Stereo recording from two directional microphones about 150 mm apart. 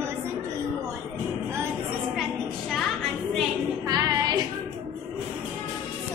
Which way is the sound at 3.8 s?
25° right (ahead or behind).